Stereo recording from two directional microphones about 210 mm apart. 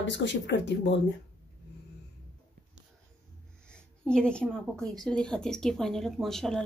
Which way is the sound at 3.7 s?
5° left (ahead or behind).